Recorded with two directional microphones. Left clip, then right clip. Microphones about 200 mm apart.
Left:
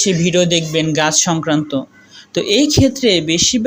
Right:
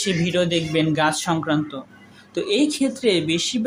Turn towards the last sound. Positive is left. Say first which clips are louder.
# left 6 dB
turn(degrees=20)  # may be behind; listen again after turning